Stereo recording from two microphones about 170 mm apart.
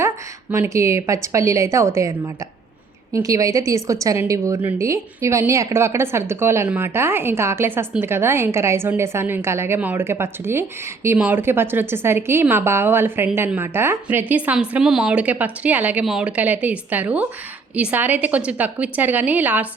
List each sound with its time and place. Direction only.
0.5 s a woman's voice: 15° right (ahead or behind)